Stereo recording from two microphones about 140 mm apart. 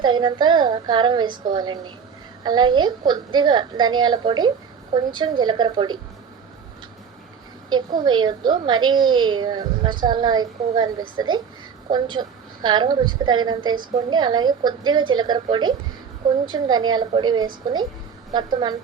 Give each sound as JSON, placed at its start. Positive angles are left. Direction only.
{"t": 0.0, "sound": "a woman's voice", "side_deg": -30}
{"t": 7.9, "sound": "a woman's voice", "side_deg": -35}